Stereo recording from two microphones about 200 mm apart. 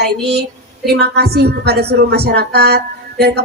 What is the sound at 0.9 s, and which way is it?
A woman's voice, 55° right (ahead or behind).